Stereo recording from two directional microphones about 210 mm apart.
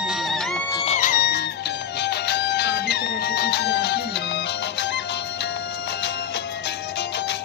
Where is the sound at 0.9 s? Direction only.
40° left (ahead or behind).